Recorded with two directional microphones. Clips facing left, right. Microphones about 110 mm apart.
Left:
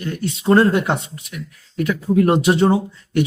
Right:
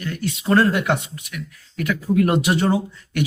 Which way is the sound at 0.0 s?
30° left (ahead or behind).